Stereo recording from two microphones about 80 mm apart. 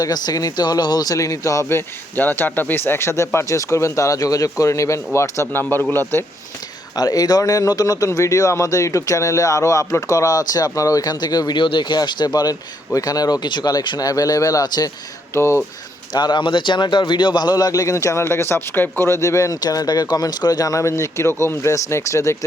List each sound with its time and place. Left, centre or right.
0.0 s speech: left
2.1 s speech: left
5.5 s a man's voice: left
6.9 s speech: left
14.0 s speech: left
15.3 s speech: left
16.1 s speech: left
19.2 s speech: left
19.5 s speech: left